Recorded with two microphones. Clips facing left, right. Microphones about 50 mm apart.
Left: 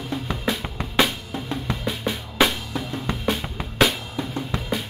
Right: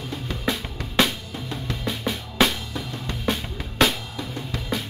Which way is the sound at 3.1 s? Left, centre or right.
Centre.